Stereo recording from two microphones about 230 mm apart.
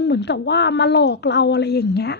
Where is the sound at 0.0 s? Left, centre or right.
Left.